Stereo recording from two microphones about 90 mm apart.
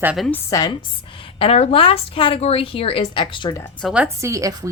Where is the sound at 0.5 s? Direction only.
50° left (ahead or behind).